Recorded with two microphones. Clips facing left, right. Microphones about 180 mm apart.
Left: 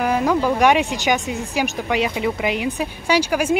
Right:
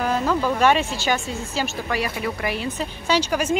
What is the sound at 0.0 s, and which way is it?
A woman's voice, 15° left (ahead or behind).